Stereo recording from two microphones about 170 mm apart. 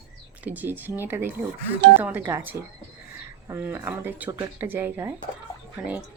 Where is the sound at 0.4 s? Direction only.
10° right (ahead or behind).